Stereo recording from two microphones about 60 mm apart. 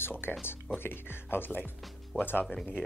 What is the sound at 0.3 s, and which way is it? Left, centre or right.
Speech, left.